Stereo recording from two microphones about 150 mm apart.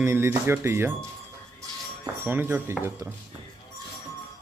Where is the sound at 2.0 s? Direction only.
15° right (ahead or behind).